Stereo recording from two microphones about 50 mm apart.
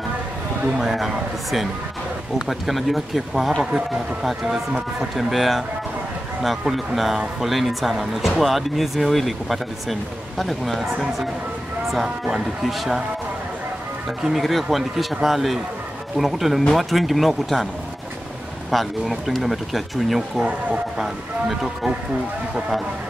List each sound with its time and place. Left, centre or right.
0.7 s speech: centre
6.7 s speech: centre
11.9 s speech: centre
14.2 s speech: centre
18.7 s speech: centre